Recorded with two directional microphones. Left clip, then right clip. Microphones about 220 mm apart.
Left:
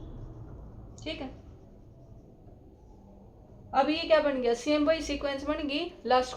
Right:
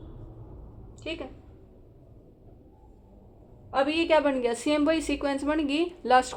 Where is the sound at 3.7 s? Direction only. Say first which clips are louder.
Right 1 dB; 45° right (ahead or behind).